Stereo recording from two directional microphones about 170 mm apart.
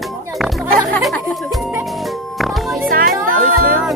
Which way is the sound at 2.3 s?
Centre (ahead or behind).